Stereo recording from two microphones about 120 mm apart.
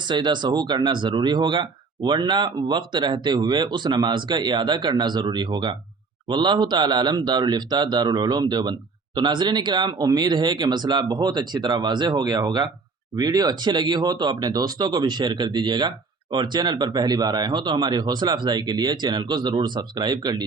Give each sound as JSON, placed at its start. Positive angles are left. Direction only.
{"t": 0.1, "sound": "speech", "side_deg": -40}